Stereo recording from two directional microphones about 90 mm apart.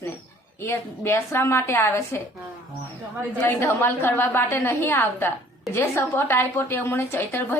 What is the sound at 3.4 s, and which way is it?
A woman's voice, 25° left (ahead or behind).